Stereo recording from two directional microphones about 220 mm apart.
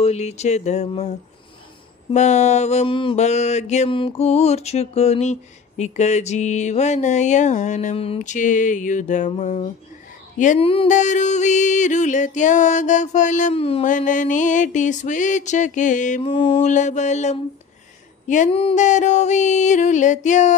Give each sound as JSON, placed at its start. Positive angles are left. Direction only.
{"t": 0.0, "sound": "mantra", "side_deg": 30}
{"t": 2.1, "sound": "mantra", "side_deg": 30}